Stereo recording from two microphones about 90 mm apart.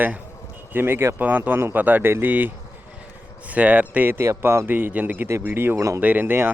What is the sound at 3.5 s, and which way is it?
Speech, 15° right (ahead or behind).